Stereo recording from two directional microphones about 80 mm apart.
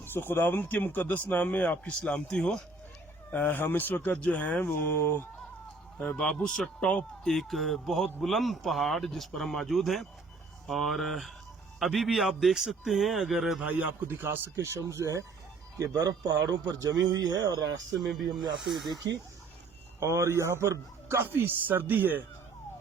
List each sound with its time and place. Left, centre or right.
0.0 s a man's voice: left; by 2.6 s centre
3.2 s a man's voice: left
6.0 s speech: centre
7.3 s a man's voice: centre
13.7 s a man's voice: centre; by 18.1 s right
18.5 s a man's voice: centre
20.0 s a man's voice: right
21.3 s speech: right